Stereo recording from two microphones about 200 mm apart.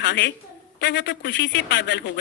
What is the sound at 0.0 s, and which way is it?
A woman's voice, 60° left (ahead or behind).